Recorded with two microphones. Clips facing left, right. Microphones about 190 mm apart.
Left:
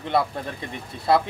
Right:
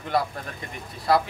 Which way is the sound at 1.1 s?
25° left (ahead or behind).